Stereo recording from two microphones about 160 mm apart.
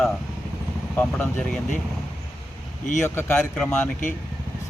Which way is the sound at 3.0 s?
15° left (ahead or behind).